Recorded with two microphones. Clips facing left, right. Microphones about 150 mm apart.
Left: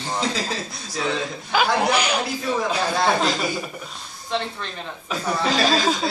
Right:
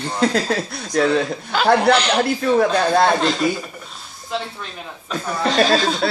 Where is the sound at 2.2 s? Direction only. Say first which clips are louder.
Right 8 dB; 60° right (ahead or behind).